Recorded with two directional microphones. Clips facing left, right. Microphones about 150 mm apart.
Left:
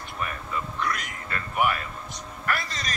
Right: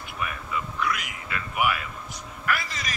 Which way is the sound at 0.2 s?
40° left (ahead or behind).